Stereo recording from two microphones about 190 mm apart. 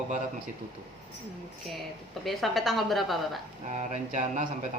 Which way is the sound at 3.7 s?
35° right (ahead or behind).